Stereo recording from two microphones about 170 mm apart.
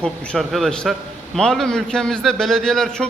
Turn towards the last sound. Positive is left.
turn(degrees=5)  # may be behind; listen again after turning